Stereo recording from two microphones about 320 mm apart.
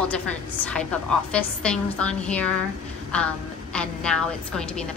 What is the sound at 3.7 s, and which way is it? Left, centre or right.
A woman's voice, centre.